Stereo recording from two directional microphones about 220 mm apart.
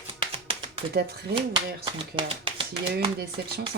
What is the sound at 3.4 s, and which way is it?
Chopping, 45° right (ahead or behind).